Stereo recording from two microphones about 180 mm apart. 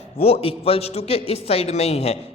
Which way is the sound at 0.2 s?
35° left (ahead or behind).